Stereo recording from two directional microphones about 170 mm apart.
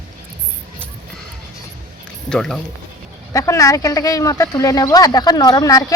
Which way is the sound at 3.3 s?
20° left (ahead or behind).